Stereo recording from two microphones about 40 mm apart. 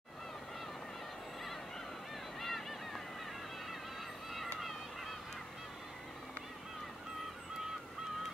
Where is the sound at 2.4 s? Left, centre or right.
Centre.